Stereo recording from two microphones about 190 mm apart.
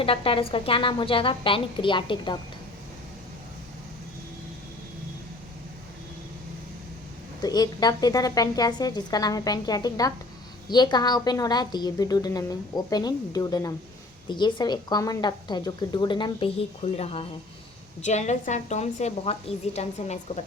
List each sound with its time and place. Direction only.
0.0 s a woman's voice: 30° left (ahead or behind)
7.4 s a woman's voice: 20° left (ahead or behind)